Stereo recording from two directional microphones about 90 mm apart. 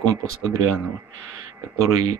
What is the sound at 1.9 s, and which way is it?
Speech, 40° right (ahead or behind).